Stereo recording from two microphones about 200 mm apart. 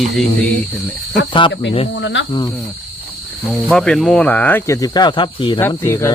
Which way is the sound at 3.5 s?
5° left (ahead or behind).